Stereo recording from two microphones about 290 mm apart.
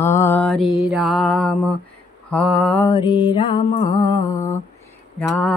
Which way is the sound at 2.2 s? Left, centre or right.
Centre.